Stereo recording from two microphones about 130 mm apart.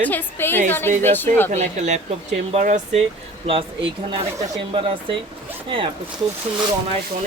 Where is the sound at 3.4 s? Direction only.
40° right (ahead or behind).